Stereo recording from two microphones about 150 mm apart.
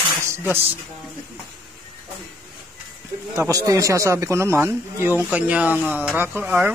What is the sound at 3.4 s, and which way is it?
Speech, 20° right (ahead or behind).